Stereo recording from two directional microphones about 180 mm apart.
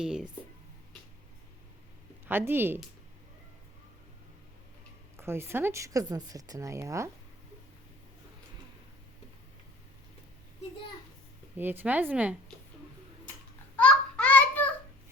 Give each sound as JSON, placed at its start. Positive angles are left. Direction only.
{"t": 0.0, "sound": "speech", "side_deg": -5}
{"t": 2.2, "sound": "a woman's voice", "side_deg": -10}
{"t": 5.1, "sound": "a woman's voice", "side_deg": -15}
{"t": 11.5, "sound": "a woman's voice", "side_deg": -10}
{"t": 13.7, "sound": "a sound", "side_deg": 5}